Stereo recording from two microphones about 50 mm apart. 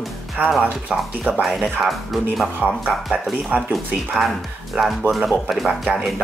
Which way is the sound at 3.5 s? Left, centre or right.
Right.